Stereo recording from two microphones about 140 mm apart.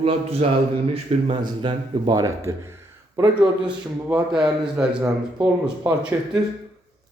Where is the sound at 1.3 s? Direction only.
35° right (ahead or behind).